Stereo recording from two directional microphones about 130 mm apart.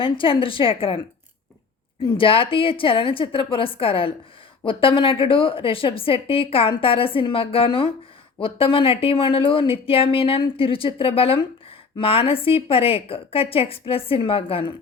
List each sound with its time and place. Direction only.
0.0 s a woman's voice: 40° left (ahead or behind)
2.1 s a woman's voice: 45° left (ahead or behind)